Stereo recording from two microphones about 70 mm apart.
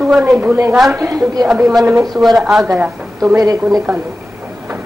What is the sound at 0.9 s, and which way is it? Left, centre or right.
Speech, right.